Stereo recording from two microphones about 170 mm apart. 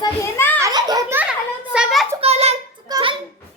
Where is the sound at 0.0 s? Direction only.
15° left (ahead or behind).